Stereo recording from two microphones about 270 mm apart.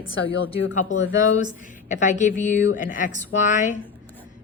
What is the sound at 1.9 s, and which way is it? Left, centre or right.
A woman's voice, left.